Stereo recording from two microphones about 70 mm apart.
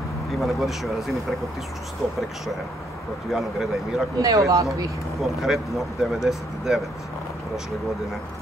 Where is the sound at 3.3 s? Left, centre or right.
Centre.